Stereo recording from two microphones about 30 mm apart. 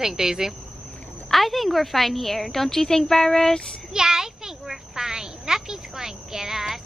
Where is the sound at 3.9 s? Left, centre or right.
Right.